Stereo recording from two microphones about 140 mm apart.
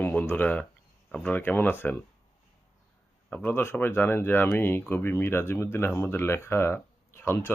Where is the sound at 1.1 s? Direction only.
10° left (ahead or behind).